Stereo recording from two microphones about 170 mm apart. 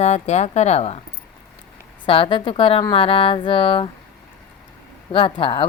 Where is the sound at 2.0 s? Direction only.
30° left (ahead or behind).